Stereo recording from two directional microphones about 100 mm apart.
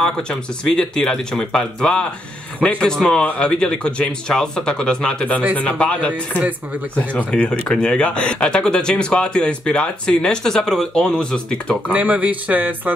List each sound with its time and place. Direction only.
0.0 s speech: 5° left (ahead or behind)
6.4 s speech: 15° right (ahead or behind)
7.2 s speech: 10° left (ahead or behind)
11.9 s speech: 15° right (ahead or behind)